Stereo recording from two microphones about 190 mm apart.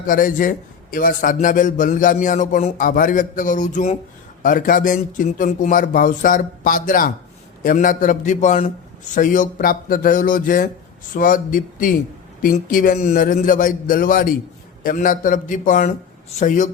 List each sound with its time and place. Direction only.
0.0 s a man's voice: 45° left (ahead or behind)